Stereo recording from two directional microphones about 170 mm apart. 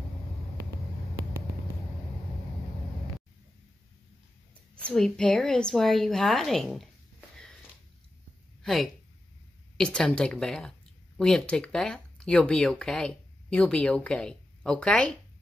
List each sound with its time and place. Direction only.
4.9 s a woman's voice: 5° left (ahead or behind)
9.8 s a woman's voice: 5° left (ahead or behind)